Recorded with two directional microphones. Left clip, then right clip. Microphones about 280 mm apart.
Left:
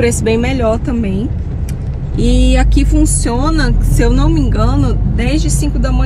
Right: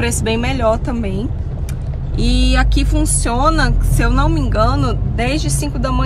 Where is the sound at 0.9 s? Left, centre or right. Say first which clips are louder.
Left 4 dB; right.